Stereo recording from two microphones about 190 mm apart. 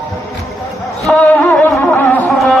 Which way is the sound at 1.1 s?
5° left (ahead or behind).